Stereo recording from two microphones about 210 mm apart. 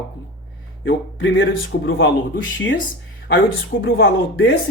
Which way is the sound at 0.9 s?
60° left (ahead or behind).